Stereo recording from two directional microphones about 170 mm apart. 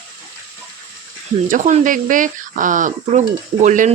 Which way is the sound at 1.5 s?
50° right (ahead or behind).